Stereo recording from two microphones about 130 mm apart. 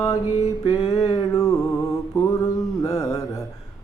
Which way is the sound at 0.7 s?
30° left (ahead or behind).